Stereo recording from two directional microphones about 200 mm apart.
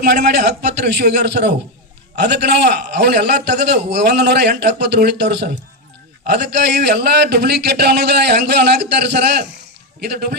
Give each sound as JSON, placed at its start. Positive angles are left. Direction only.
{"t": 0.0, "sound": "a man's voice", "side_deg": -55}